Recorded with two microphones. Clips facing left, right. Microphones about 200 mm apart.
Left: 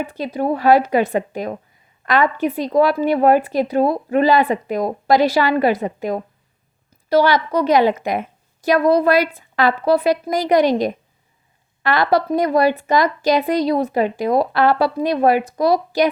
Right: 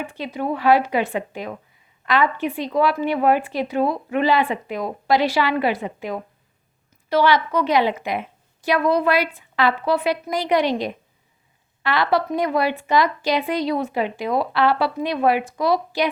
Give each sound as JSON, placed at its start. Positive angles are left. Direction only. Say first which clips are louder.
{"t": 0.1, "sound": "a woman's voice", "louder": "left 5 dB", "side_deg": 40}